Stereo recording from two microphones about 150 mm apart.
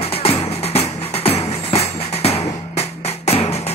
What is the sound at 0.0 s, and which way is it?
Music, 40° left (ahead or behind).